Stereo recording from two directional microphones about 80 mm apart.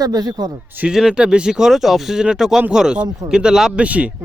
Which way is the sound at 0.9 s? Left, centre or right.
Centre.